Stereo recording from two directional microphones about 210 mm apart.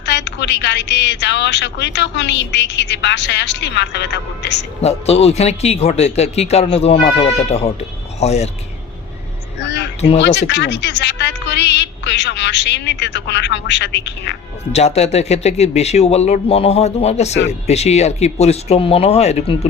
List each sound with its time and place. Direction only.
0.0 s a woman's voice: 55° left (ahead or behind)
4.8 s a man's voice: 30° left (ahead or behind)
10.2 s a woman's voice: 55° left (ahead or behind)
14.7 s a man's voice: 30° left (ahead or behind)